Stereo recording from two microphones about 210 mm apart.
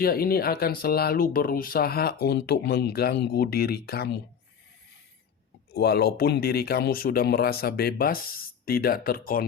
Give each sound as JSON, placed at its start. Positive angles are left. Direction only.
{"t": 0.0, "sound": "speech", "side_deg": 45}
{"t": 5.7, "sound": "speech", "side_deg": 50}